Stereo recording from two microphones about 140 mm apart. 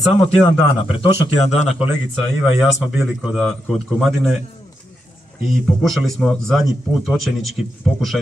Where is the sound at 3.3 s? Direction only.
Centre (ahead or behind).